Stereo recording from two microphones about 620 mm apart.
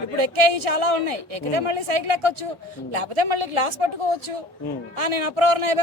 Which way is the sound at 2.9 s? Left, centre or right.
Right.